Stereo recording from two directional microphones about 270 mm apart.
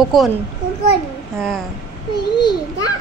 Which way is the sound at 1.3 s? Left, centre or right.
Centre.